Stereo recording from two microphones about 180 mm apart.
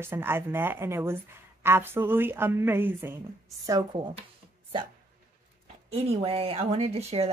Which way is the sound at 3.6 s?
25° right (ahead or behind).